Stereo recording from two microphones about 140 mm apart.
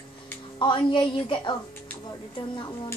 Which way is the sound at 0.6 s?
35° left (ahead or behind).